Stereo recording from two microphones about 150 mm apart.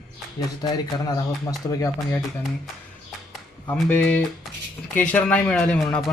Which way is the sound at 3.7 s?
10° left (ahead or behind).